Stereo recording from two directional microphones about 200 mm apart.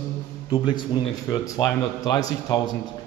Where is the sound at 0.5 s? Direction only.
20° left (ahead or behind).